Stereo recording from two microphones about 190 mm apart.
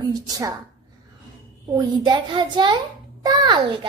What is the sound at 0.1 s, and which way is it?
Speech, 20° right (ahead or behind).